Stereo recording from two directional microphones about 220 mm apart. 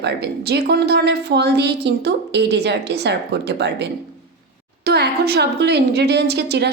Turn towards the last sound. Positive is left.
turn(degrees=-50)  # may be behind; listen again after turning